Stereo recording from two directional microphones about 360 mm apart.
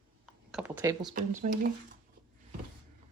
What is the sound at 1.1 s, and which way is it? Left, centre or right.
Speech, right.